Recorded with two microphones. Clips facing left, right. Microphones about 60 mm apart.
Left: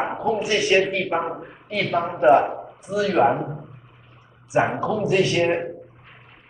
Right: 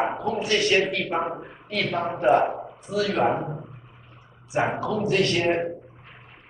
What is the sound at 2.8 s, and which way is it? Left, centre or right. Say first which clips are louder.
Speech: left 3 dB; centre.